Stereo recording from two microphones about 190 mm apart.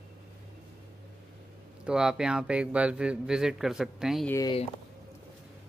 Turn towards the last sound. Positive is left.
turn(degrees=20)  # may be behind; listen again after turning